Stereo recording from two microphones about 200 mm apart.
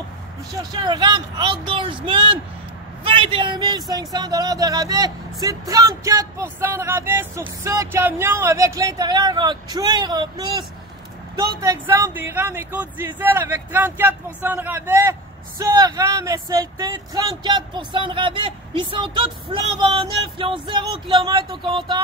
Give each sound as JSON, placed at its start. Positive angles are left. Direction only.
{"t": 0.6, "sound": "speech", "side_deg": -20}